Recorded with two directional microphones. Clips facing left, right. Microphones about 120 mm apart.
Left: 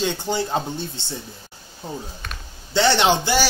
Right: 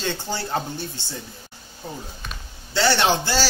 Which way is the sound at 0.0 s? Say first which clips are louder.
Left 4 dB; 15° left (ahead or behind).